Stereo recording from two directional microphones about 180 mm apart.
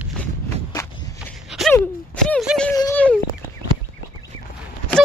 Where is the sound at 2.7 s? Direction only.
15° left (ahead or behind).